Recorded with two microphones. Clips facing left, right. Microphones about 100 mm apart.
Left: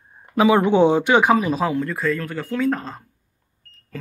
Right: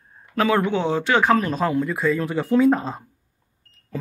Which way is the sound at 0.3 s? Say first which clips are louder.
Left 4 dB; 15° left (ahead or behind).